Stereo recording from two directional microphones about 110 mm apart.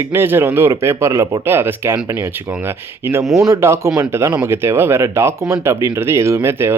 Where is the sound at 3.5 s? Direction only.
25° right (ahead or behind).